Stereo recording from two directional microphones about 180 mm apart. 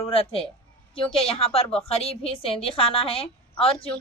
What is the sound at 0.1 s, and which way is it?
A woman's voice, 30° left (ahead or behind).